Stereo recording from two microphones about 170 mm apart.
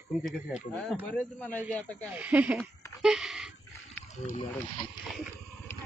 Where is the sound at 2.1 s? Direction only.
10° right (ahead or behind).